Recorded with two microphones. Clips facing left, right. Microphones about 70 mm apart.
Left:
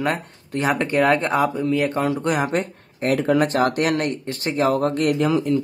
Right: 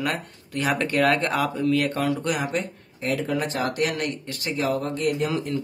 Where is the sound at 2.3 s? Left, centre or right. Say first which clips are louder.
Left 5 dB; left.